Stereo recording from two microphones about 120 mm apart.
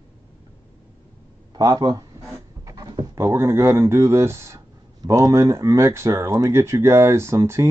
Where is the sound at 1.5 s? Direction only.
35° right (ahead or behind).